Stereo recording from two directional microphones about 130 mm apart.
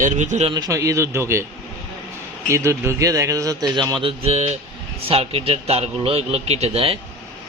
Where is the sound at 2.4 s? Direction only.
20° right (ahead or behind).